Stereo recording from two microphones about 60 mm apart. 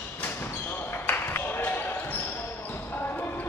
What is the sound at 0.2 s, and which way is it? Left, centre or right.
Basketball bounce, left.